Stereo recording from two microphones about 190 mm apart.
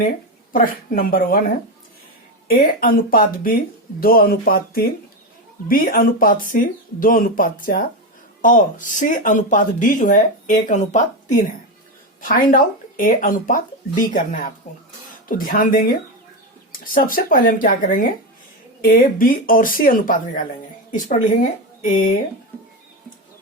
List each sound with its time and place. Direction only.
0.5 s speech: 45° left (ahead or behind)
2.5 s speech: 50° left (ahead or behind)
15.3 s speech: 50° left (ahead or behind)